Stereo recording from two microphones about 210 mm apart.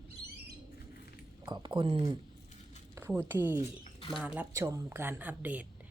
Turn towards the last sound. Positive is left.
turn(degrees=-10)  # may be behind; listen again after turning